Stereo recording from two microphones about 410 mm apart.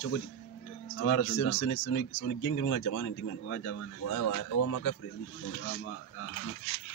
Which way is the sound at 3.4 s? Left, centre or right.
Left.